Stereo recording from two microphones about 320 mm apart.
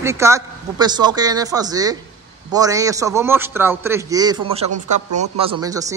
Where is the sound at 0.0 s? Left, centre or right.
Centre.